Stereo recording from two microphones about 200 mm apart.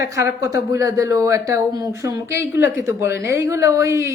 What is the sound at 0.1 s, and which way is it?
Speech, 15° right (ahead or behind).